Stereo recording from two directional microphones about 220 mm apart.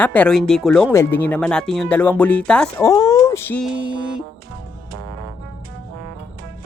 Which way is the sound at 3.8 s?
20° right (ahead or behind).